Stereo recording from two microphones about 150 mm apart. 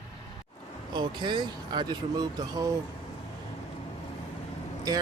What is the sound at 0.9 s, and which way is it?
Speech, 30° right (ahead or behind).